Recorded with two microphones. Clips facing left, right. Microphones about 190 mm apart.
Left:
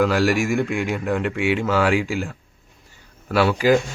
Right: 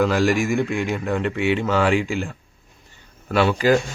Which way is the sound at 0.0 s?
5° left (ahead or behind).